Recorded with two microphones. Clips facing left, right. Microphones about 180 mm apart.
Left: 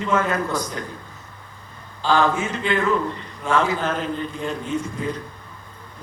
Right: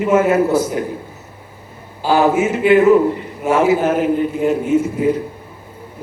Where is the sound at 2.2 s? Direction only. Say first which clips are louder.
Right 8 dB; 10° right (ahead or behind).